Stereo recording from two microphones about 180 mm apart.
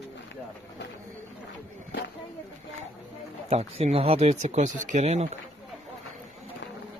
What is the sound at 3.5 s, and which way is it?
Speech, 35° right (ahead or behind).